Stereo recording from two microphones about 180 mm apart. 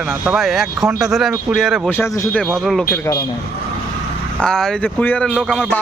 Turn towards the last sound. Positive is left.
turn(degrees=5)  # may be behind; listen again after turning